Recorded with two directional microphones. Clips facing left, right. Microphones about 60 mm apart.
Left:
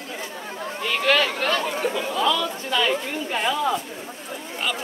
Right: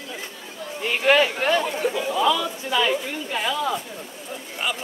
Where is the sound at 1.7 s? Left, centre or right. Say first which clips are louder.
Right 1 dB; centre.